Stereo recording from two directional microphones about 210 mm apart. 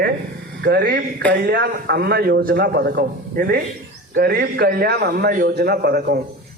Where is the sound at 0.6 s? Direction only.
45° right (ahead or behind).